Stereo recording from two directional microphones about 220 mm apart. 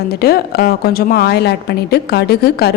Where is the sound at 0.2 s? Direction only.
45° left (ahead or behind).